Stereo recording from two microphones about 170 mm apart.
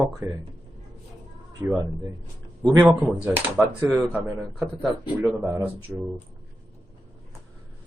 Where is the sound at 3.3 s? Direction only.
10° right (ahead or behind).